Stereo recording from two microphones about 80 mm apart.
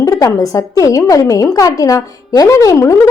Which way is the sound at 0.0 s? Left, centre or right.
Left.